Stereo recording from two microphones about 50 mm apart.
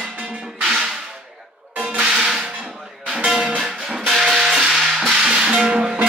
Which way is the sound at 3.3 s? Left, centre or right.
Centre.